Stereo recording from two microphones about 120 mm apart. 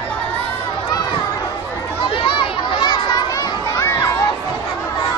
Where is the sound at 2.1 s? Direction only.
45° left (ahead or behind); by 4.1 s 25° left (ahead or behind).